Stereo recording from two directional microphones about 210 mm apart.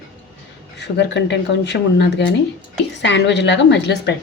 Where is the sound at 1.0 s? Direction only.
55° left (ahead or behind).